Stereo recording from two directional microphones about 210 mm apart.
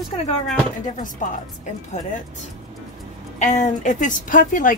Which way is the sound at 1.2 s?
40° left (ahead or behind).